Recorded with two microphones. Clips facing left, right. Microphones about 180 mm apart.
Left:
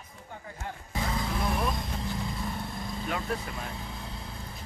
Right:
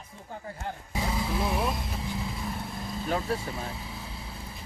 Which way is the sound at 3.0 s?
35° right (ahead or behind).